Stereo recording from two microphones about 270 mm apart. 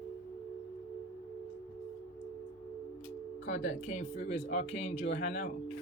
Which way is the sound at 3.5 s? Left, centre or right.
Left.